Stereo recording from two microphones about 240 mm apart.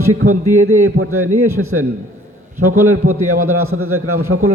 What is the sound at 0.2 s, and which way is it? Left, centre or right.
A man's voice, right.